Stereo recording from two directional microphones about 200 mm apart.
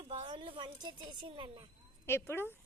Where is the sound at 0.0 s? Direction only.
25° right (ahead or behind).